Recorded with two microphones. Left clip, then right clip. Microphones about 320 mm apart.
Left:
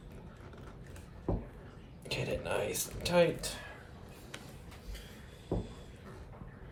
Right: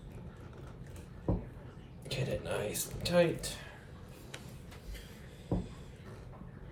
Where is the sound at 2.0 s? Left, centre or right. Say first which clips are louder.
Left 1 dB; centre.